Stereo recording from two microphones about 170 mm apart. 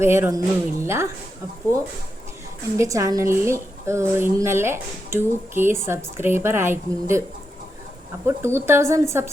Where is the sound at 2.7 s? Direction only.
20° right (ahead or behind).